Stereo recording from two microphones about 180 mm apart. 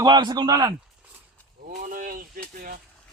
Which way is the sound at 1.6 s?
50° right (ahead or behind).